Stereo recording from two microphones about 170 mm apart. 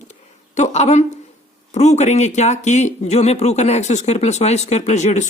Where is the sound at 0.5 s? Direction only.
40° left (ahead or behind).